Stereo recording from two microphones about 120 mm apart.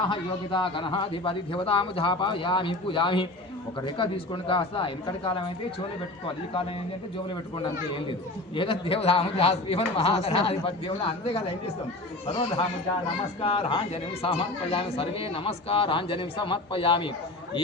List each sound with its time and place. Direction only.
0.1 s speech: 45° left (ahead or behind)
8.5 s speech: 50° left (ahead or behind)
13.4 s speech: 50° left (ahead or behind)